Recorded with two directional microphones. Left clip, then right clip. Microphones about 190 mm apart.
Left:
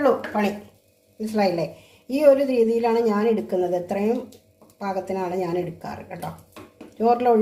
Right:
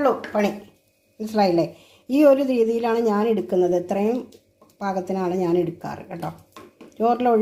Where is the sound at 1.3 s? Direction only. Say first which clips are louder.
Right 3 dB; 35° right (ahead or behind).